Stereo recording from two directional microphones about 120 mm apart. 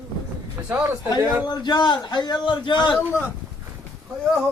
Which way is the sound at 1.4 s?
35° left (ahead or behind).